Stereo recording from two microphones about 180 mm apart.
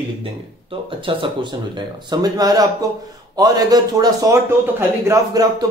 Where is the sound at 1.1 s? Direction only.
30° right (ahead or behind).